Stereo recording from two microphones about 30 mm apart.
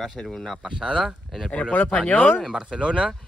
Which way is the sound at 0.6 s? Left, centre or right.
Right.